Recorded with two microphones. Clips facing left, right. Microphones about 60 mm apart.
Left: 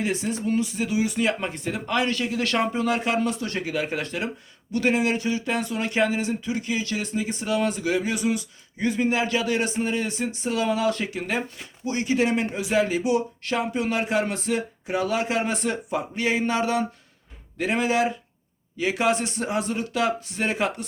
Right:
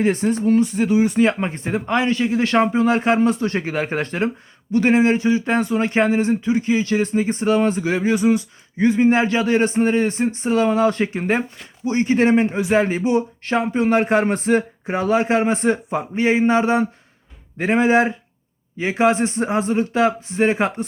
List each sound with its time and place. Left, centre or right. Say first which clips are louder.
0.0 s speech: right 8 dB; right